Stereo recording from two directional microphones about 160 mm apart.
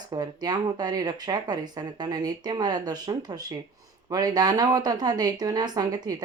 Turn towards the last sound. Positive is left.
turn(degrees=-25)  # may be behind; listen again after turning